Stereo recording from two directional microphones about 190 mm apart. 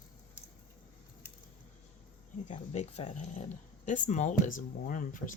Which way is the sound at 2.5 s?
35° left (ahead or behind).